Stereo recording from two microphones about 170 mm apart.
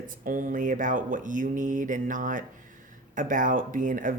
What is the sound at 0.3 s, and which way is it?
Speech, 50° right (ahead or behind).